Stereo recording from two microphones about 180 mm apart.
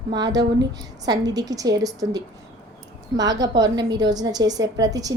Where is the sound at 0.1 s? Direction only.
20° right (ahead or behind).